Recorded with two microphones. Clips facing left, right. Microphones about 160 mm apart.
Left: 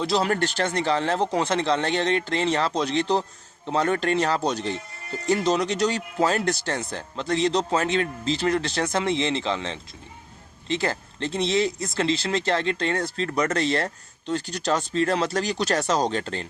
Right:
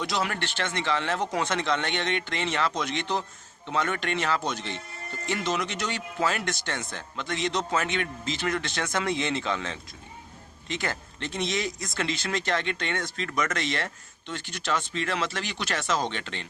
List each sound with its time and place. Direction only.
0.0 s speech: 30° left (ahead or behind)